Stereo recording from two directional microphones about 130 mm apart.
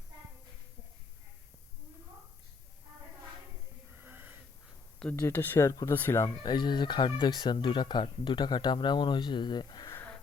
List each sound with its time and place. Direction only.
4.0 s wheeze: 15° right (ahead or behind)
5.2 s speech: 15° left (ahead or behind)
6.4 s speech: 35° left (ahead or behind)